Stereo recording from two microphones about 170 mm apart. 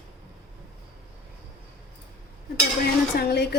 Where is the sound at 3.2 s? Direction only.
70° left (ahead or behind).